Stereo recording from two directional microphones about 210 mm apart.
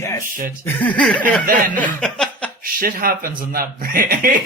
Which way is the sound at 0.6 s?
10° left (ahead or behind).